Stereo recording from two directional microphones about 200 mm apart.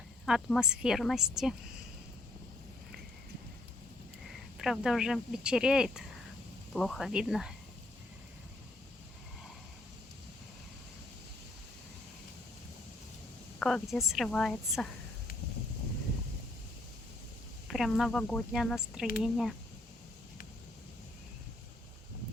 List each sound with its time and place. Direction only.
0.3 s speech: centre (ahead or behind)
4.5 s speech: centre (ahead or behind)
13.6 s speech: 5° left (ahead or behind)
17.7 s speech: centre (ahead or behind)